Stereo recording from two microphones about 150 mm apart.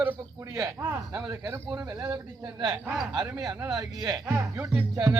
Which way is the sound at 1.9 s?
20° right (ahead or behind).